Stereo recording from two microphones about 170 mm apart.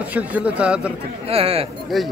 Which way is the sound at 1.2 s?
35° right (ahead or behind).